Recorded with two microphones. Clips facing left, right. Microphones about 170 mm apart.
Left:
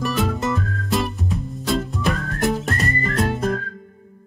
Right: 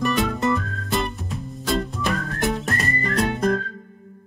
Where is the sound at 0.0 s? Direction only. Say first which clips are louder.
Right 1 dB; centre (ahead or behind).